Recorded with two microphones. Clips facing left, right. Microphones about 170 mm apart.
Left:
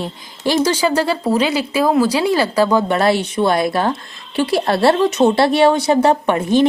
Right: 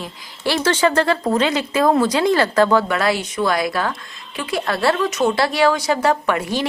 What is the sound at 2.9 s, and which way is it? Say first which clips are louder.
Speech: left 4 dB; 30° left (ahead or behind).